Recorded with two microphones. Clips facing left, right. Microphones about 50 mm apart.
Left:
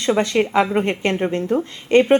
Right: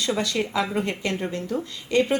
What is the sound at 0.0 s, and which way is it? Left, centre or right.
A woman's voice, left.